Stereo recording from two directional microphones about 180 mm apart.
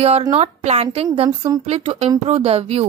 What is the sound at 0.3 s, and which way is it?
A woman's voice, 35° right (ahead or behind).